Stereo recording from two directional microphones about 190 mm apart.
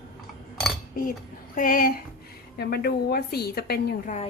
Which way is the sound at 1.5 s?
45° left (ahead or behind).